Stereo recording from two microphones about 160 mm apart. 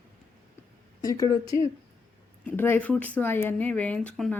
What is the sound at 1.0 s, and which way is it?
Speech, 20° left (ahead or behind).